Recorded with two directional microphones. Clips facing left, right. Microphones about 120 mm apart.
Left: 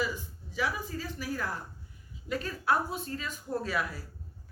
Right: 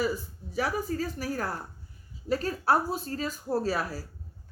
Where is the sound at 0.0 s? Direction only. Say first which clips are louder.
Right 4 dB; 40° right (ahead or behind).